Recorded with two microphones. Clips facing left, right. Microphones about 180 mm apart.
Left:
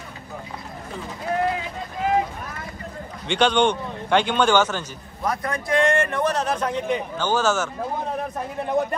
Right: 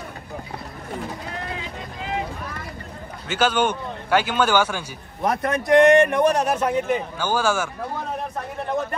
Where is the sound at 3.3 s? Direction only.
5° right (ahead or behind).